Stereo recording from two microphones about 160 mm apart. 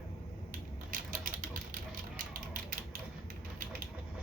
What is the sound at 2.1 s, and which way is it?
Ratchet, 60° right (ahead or behind).